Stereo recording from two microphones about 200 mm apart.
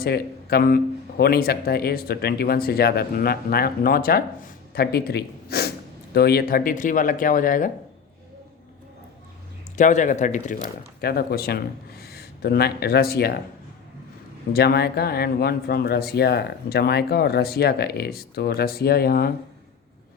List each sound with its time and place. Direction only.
0.0 s speech: 50° left (ahead or behind)
9.7 s speech: 40° left (ahead or behind)
14.5 s speech: 50° left (ahead or behind)